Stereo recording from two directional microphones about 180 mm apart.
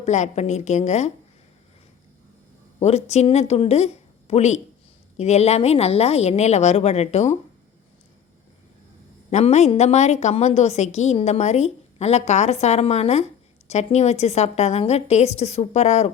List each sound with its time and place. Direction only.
0.0 s a woman's voice: 40° left (ahead or behind)
2.7 s a woman's voice: 35° left (ahead or behind)
9.3 s a woman's voice: 40° left (ahead or behind)